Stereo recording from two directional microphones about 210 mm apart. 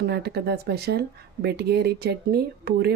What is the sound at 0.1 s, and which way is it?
Speech, 50° right (ahead or behind).